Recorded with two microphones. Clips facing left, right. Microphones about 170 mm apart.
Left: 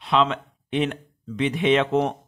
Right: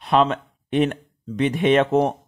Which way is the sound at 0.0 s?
45° right (ahead or behind).